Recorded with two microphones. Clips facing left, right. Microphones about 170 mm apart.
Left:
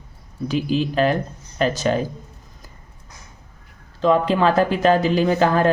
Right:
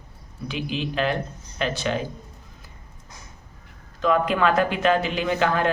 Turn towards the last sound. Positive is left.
turn(degrees=40)  # may be behind; listen again after turning